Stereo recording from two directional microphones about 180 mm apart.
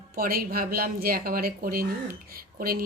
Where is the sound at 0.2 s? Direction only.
55° right (ahead or behind).